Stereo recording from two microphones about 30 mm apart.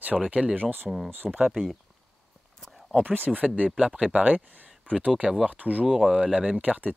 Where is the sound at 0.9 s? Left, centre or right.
Centre.